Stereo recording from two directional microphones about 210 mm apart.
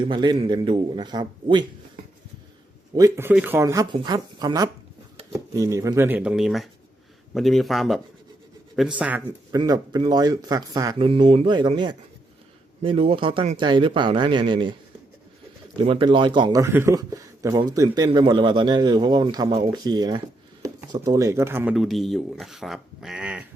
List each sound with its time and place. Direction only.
0.0 s speech: 20° right (ahead or behind)
2.9 s a man's voice: 15° right (ahead or behind)
9.6 s speech: 20° right (ahead or behind)
15.8 s speech: 25° right (ahead or behind); by 23.4 s 5° right (ahead or behind)